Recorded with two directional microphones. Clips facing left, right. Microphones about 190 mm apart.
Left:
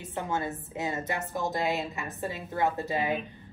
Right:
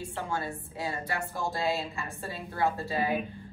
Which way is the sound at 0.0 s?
20° left (ahead or behind).